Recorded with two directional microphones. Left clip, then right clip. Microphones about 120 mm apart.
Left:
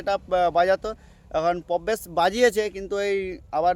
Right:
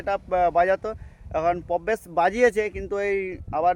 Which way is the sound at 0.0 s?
30° left (ahead or behind).